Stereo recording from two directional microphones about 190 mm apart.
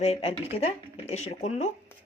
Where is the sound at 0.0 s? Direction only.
35° left (ahead or behind).